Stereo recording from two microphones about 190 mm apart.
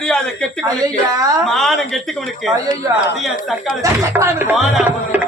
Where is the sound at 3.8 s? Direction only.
15° right (ahead or behind).